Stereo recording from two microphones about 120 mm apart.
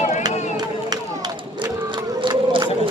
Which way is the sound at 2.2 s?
40° right (ahead or behind).